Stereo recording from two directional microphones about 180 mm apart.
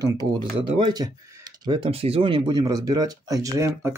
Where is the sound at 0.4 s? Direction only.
25° right (ahead or behind).